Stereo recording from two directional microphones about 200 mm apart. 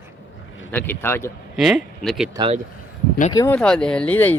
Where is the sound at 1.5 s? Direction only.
Centre (ahead or behind).